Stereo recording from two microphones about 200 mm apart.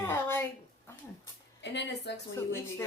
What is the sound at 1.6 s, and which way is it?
Speech, 60° left (ahead or behind).